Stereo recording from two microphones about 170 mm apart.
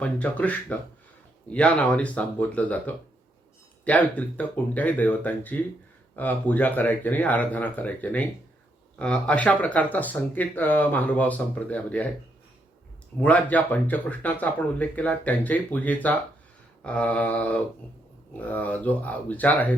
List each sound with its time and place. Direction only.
0.0 s speech: 10° left (ahead or behind)
13.1 s speech: 10° left (ahead or behind)